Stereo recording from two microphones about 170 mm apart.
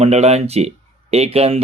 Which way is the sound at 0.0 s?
40° right (ahead or behind).